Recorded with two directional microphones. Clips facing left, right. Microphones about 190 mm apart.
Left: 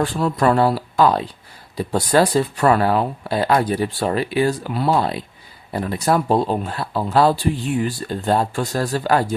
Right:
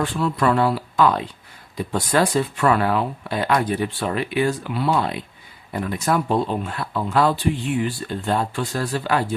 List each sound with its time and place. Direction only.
0.0 s speech: 40° left (ahead or behind)